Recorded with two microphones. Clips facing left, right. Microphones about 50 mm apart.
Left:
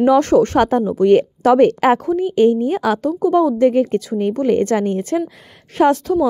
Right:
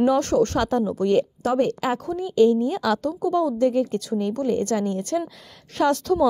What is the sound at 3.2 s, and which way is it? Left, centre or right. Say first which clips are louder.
A woman's voice: left 7 dB; left.